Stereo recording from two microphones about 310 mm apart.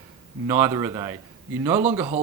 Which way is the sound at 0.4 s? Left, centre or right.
Centre.